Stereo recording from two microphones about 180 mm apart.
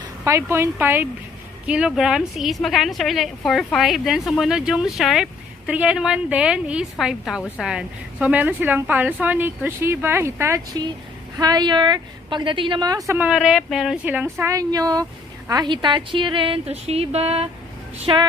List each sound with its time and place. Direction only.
0.3 s a woman's voice: 15° right (ahead or behind)
13.1 s a woman's voice: 5° right (ahead or behind); by 18.3 s 25° right (ahead or behind)